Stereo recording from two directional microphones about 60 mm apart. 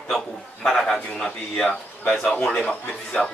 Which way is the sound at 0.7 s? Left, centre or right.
Centre.